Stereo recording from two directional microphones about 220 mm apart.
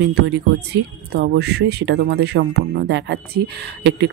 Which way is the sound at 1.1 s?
50° right (ahead or behind).